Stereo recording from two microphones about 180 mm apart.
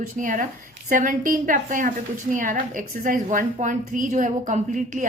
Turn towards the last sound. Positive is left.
turn(degrees=-45)  # may be behind; listen again after turning